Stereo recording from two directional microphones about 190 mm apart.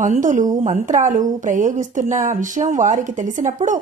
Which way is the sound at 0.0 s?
40° right (ahead or behind).